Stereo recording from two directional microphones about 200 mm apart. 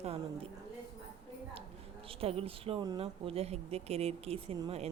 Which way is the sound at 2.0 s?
30° right (ahead or behind).